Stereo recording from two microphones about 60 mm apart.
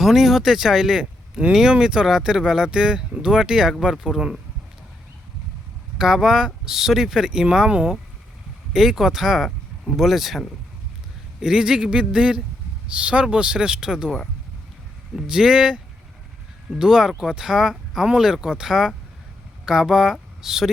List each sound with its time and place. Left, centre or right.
0.0 s speech: centre
6.0 s speech: centre